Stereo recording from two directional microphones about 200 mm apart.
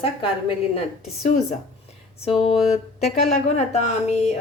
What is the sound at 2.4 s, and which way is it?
A woman's voice, 30° left (ahead or behind).